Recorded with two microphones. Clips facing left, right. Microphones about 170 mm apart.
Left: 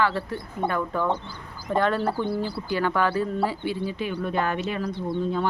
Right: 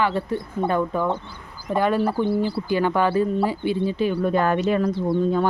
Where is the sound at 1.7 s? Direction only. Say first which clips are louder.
Right 3 dB; 10° right (ahead or behind); by 5.0 s 40° right (ahead or behind).